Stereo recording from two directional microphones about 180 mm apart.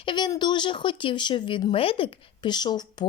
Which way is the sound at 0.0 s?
25° left (ahead or behind).